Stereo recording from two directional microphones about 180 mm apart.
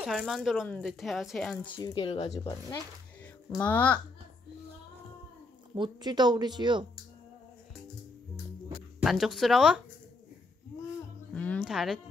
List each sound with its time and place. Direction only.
0.0 s speech: centre (ahead or behind)
1.7 s speech: 25° left (ahead or behind)
3.5 s a child's voice: 10° left (ahead or behind)
5.8 s a woman's voice: 25° right (ahead or behind)
9.0 s speech: centre (ahead or behind)
11.3 s music: 5° left (ahead or behind)